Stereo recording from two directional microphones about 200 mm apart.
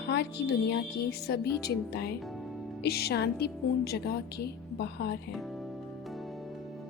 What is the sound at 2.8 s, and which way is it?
Speech, 50° left (ahead or behind).